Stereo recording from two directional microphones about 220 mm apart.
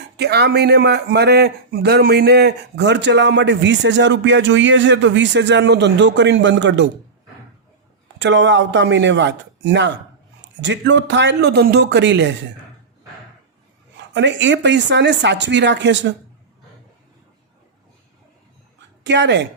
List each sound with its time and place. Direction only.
0.2 s a man's voice: 50° right (ahead or behind)
8.2 s a man's voice: 55° right (ahead or behind)
13.9 s a man's voice: 55° right (ahead or behind)
19.0 s a man's voice: 55° right (ahead or behind)